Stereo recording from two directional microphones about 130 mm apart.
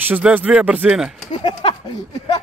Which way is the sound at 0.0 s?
15° right (ahead or behind).